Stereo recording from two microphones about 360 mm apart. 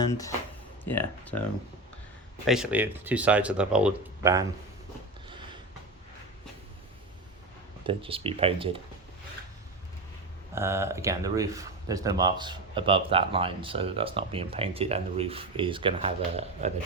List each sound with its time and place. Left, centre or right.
0.0 s speech: centre
2.5 s speech: centre
7.9 s speech: centre
10.5 s speech: centre